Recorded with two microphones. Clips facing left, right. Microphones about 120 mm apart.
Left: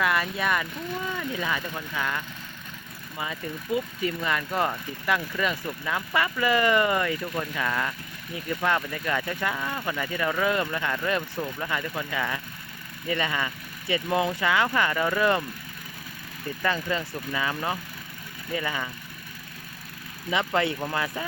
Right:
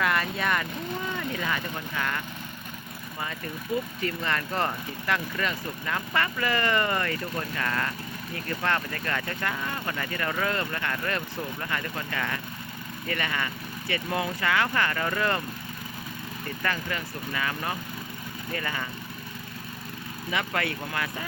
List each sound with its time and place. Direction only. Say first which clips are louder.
0.0 s speech: left 1 dB; 10° left (ahead or behind)
4.0 s speech: left 2 dB; 10° left (ahead or behind)
16.6 s speech: left 4 dB; 20° left (ahead or behind)
20.3 s speech: left 4 dB; 25° left (ahead or behind)